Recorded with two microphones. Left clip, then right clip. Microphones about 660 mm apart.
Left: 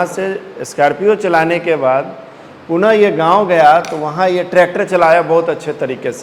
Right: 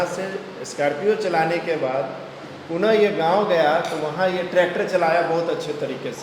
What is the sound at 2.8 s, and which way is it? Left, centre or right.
Speech, left.